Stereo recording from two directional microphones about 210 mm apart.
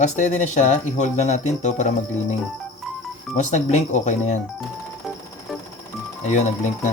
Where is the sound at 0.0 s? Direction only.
35° left (ahead or behind).